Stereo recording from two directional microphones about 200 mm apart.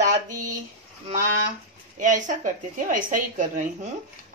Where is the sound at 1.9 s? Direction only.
40° right (ahead or behind).